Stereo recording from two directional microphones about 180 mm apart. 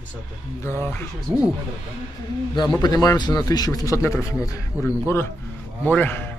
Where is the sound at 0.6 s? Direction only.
15° left (ahead or behind).